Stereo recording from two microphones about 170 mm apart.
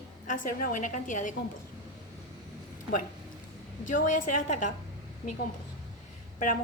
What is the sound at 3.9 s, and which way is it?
Speech, 50° left (ahead or behind).